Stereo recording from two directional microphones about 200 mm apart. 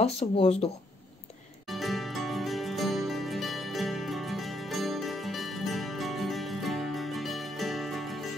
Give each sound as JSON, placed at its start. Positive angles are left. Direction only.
{"t": 0.4, "sound": "speech", "side_deg": 30}
{"t": 1.7, "sound": "music", "side_deg": 0}